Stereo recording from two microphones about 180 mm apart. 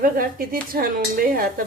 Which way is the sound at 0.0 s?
55° right (ahead or behind).